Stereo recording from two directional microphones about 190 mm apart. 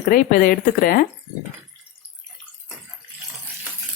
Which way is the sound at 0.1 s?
50° left (ahead or behind).